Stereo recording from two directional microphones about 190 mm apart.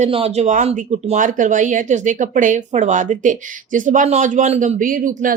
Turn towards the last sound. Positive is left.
turn(degrees=-45)  # may be behind; listen again after turning